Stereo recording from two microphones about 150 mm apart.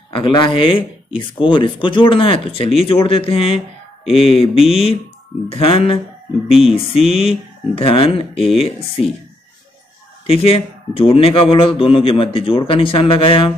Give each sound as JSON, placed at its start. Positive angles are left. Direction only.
{"t": 0.1, "sound": "speech", "side_deg": 35}
{"t": 10.2, "sound": "speech", "side_deg": 40}